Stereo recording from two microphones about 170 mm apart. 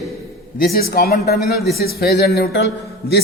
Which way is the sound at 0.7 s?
60° left (ahead or behind).